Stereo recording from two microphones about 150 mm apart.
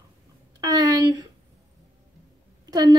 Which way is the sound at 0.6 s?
25° right (ahead or behind).